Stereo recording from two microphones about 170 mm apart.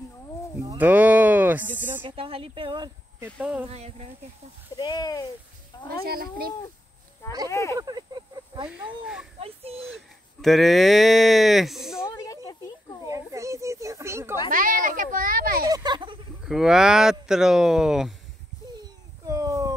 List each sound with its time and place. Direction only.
0.6 s a sound: 15° right (ahead or behind)
2.0 s speech: 35° right (ahead or behind)
3.3 s speech: 5° right (ahead or behind)
3.6 s speech: 40° right (ahead or behind)
4.7 s speech: 25° left (ahead or behind)
6.0 s speech: 65° right (ahead or behind)
7.4 s speech: 20° left (ahead or behind)
7.8 s a sound: 25° right (ahead or behind)
8.6 s speech: 5° right (ahead or behind)
13.0 s a sound: 20° right (ahead or behind)
14.5 s a child's voice: 50° right (ahead or behind)
15.6 s speech: 25° right (ahead or behind)
16.4 s speech: 5° right (ahead or behind)
19.2 s a sound: 20° right (ahead or behind)